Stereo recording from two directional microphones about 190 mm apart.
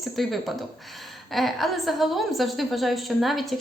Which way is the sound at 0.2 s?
Centre (ahead or behind).